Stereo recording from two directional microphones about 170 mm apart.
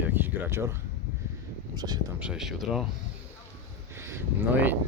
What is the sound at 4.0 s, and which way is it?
Speech, 15° right (ahead or behind).